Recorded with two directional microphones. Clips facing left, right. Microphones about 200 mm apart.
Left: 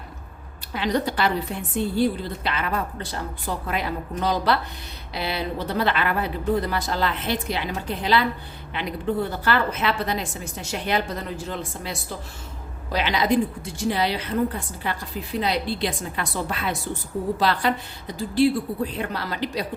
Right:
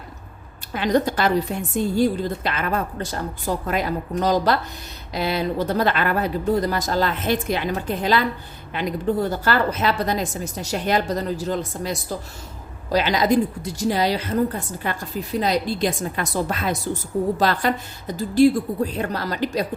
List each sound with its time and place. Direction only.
0.7 s a woman's voice: 45° right (ahead or behind)